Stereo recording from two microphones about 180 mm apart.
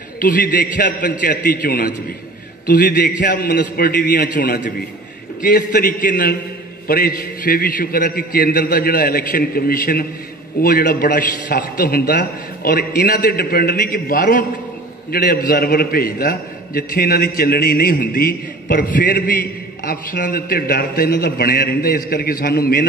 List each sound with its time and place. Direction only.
0.2 s a man's voice: 50° left (ahead or behind)